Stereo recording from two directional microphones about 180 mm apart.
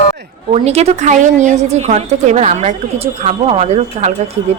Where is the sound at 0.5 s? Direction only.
35° right (ahead or behind).